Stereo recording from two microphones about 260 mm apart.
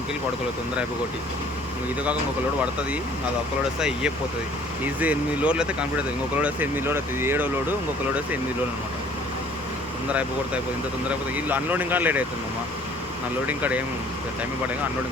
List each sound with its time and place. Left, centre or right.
3.8 s speech: centre
10.1 s speech: centre
13.5 s speech: centre